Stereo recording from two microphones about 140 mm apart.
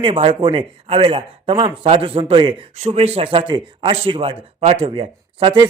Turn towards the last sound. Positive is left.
turn(degrees=-35)  # may be behind; listen again after turning